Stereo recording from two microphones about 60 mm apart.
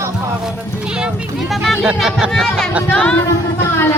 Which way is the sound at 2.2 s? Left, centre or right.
Centre.